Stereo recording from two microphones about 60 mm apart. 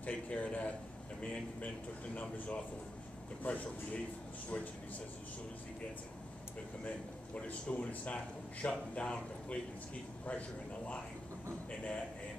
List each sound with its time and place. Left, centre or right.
0.0 s speech: left
7.3 s speech: left